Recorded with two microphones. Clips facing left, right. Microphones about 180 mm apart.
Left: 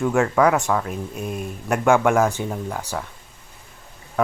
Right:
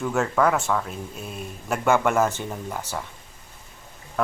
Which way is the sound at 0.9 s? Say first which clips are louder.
Left 6 dB; 50° left (ahead or behind).